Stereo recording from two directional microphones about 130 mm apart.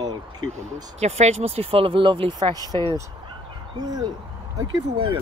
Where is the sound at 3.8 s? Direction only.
30° right (ahead or behind).